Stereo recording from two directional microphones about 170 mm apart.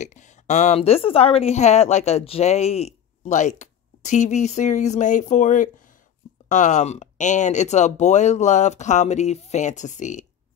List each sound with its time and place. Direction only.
0.0 s a woman's voice: 45° left (ahead or behind)